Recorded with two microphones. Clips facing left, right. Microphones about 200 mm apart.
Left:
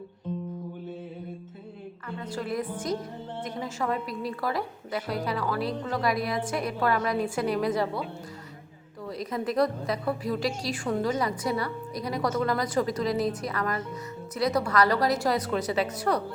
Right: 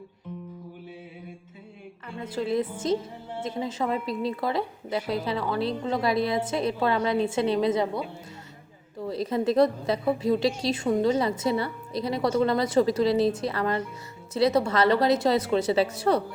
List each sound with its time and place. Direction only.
2.2 s a woman's voice: 25° right (ahead or behind)